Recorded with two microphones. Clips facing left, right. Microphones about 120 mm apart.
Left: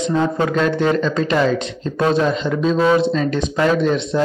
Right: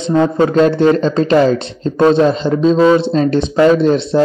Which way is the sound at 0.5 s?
35° right (ahead or behind).